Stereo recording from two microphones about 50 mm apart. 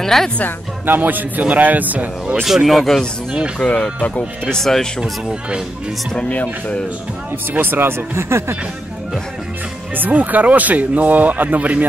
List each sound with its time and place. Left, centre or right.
0.0 s speech: centre
0.8 s speech: right
2.4 s speech: centre
3.6 s speech: left
6.2 s speech: left
7.5 s speech: right
9.9 s speech: right